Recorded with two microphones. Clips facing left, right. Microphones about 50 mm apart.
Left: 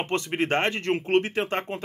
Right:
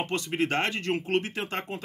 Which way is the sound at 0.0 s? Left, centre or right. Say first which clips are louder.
Left 2 dB; left.